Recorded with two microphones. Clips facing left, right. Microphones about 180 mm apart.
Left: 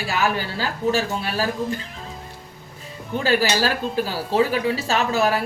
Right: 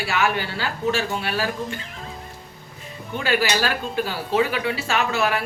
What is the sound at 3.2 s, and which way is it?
Speech, 35° left (ahead or behind).